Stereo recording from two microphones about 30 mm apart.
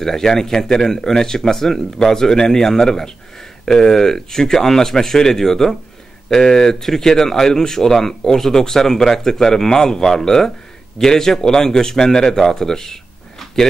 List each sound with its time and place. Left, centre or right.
0.0 s a man's voice: centre